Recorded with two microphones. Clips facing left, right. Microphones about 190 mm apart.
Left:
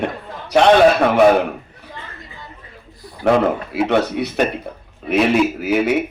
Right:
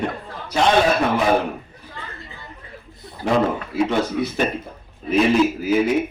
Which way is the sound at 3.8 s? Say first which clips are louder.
Left 2 dB; 65° left (ahead or behind).